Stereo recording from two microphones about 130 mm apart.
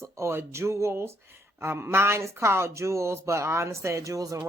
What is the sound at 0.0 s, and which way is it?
A woman's voice, 20° right (ahead or behind).